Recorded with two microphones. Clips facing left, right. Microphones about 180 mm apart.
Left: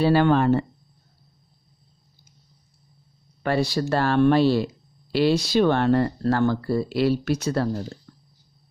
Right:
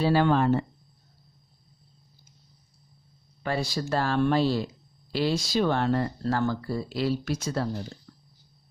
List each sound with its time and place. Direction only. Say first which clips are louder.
0.0 s speech: left 4 dB; 65° left (ahead or behind)
3.4 s speech: left 6 dB; 65° left (ahead or behind)